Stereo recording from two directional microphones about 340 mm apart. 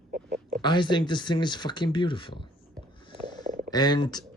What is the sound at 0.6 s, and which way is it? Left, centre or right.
Speech, centre.